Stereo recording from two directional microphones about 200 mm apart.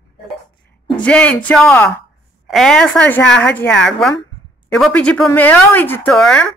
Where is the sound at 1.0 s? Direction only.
5° left (ahead or behind).